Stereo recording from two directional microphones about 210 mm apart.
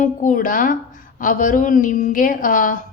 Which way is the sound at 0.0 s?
40° left (ahead or behind).